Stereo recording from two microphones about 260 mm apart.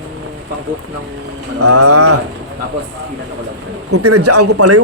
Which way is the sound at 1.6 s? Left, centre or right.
Right.